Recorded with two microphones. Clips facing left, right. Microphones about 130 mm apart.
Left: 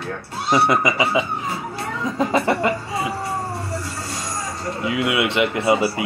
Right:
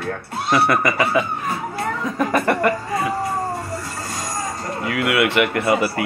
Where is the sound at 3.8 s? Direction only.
50° right (ahead or behind).